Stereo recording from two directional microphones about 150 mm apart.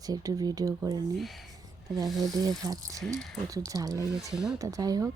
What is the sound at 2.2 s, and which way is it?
Speech, 25° right (ahead or behind).